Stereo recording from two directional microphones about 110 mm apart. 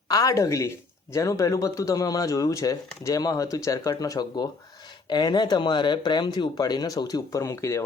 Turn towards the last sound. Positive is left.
turn(degrees=25)  # may be behind; listen again after turning